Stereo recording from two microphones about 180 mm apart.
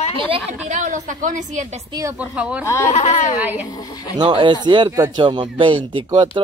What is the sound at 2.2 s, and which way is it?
Speech, 5° right (ahead or behind).